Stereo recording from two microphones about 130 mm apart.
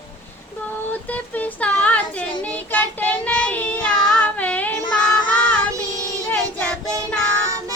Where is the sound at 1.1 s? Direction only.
10° left (ahead or behind).